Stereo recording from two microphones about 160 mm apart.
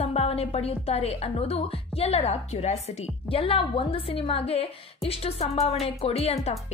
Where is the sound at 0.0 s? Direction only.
40° left (ahead or behind).